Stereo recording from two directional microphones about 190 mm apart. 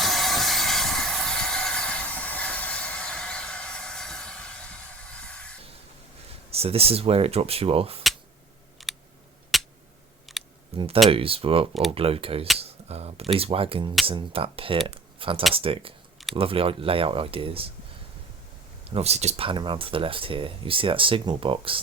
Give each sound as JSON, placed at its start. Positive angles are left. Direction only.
{"t": 0.0, "sound": "steam", "side_deg": 0}
{"t": 5.1, "sound": "music", "side_deg": 5}
{"t": 6.5, "sound": "speech", "side_deg": -30}
{"t": 8.8, "sound": "a sound", "side_deg": 0}
{"t": 10.8, "sound": "speech", "side_deg": -30}
{"t": 18.9, "sound": "speech", "side_deg": -35}